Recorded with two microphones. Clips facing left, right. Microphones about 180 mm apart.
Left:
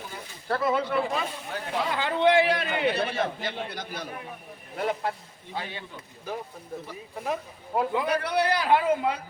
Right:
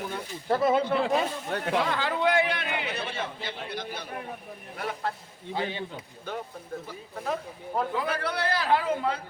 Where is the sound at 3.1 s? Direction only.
45° left (ahead or behind).